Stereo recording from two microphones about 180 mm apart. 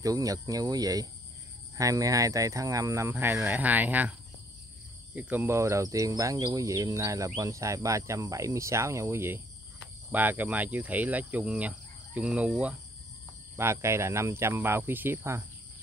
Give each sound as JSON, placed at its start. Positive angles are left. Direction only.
{"t": 0.0, "sound": "speech", "side_deg": -20}
{"t": 1.8, "sound": "cricket", "side_deg": -20}
{"t": 5.1, "sound": "cricket", "side_deg": -10}